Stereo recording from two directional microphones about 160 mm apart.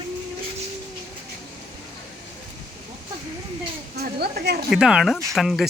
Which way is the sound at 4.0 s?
90° right.